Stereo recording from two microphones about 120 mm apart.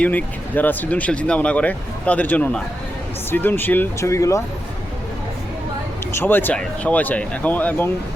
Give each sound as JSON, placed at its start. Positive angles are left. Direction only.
{"t": 0.0, "sound": "speech", "side_deg": 15}
{"t": 6.1, "sound": "speech", "side_deg": 20}